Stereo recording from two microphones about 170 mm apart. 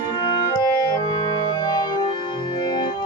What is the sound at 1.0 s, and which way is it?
Organ, 25° left (ahead or behind).